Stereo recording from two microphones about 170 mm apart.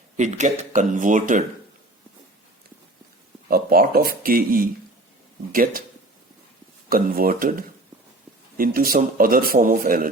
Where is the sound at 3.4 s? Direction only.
60° right (ahead or behind).